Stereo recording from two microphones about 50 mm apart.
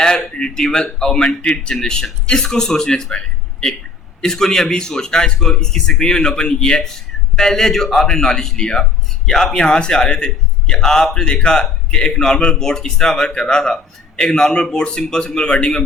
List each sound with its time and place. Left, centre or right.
0.3 s a man's voice: centre